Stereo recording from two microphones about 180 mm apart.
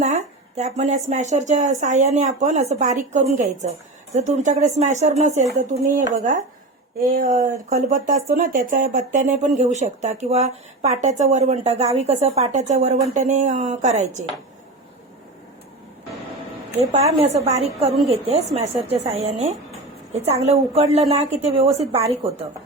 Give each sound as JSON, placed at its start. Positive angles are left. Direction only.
{"t": 0.0, "sound": "speech", "side_deg": -40}
{"t": 7.0, "sound": "speech", "side_deg": -50}
{"t": 16.9, "sound": "speech", "side_deg": -35}